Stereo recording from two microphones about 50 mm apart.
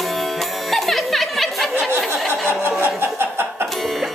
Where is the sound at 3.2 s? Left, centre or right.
Right.